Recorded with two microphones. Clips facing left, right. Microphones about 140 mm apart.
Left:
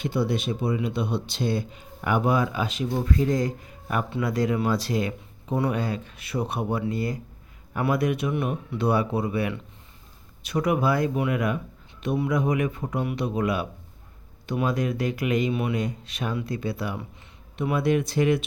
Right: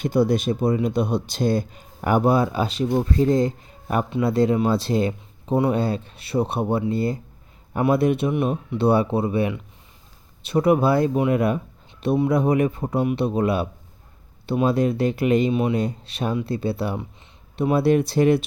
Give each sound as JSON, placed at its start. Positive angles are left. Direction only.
{"t": 0.0, "sound": "a man's voice", "side_deg": -45}